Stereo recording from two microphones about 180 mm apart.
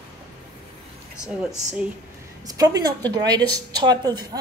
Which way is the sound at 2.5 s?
20° right (ahead or behind).